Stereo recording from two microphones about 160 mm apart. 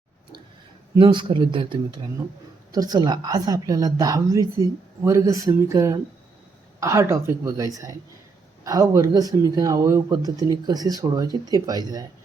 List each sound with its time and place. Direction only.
0.9 s speech: 30° right (ahead or behind)